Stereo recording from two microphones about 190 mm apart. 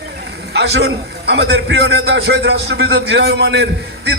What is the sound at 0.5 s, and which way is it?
A man's voice, 60° right (ahead or behind).